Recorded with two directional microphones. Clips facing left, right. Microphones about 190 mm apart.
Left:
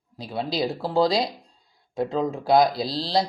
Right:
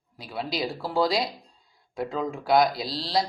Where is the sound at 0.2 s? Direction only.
30° left (ahead or behind).